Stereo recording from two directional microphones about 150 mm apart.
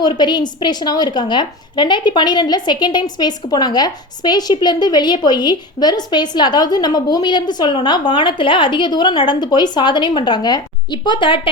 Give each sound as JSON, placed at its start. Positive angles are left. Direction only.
{"t": 0.0, "sound": "a woman's voice", "side_deg": 30}